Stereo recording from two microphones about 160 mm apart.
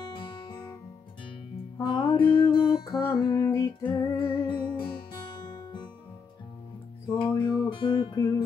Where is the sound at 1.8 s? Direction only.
30° left (ahead or behind).